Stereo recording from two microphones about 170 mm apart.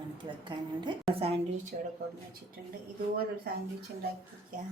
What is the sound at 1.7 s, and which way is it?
Speech, 50° right (ahead or behind).